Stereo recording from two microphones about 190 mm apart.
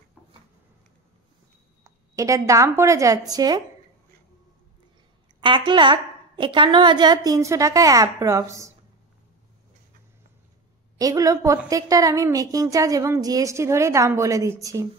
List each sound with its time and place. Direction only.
1.9 s a woman's voice: 15° right (ahead or behind)
5.4 s a woman's voice: 25° right (ahead or behind)
11.0 s a woman's voice: 20° right (ahead or behind)